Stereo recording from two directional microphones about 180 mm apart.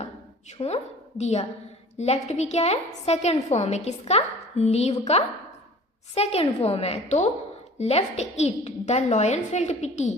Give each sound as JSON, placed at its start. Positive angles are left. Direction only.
{"t": 0.6, "sound": "a woman's voice", "side_deg": 35}